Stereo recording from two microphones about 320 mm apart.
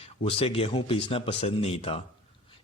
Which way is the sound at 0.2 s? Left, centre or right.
Centre.